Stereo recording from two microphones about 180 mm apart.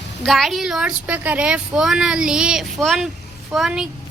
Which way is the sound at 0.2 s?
Centre (ahead or behind).